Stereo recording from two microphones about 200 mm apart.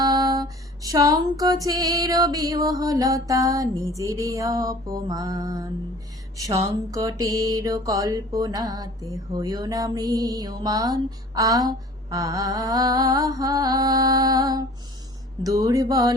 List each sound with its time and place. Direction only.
0.0 s mantra: 20° right (ahead or behind)